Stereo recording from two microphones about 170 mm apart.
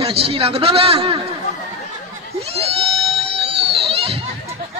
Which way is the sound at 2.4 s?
35° right (ahead or behind).